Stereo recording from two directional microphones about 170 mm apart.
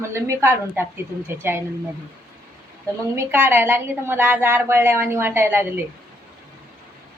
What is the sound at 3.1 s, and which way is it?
A woman's voice, 15° right (ahead or behind).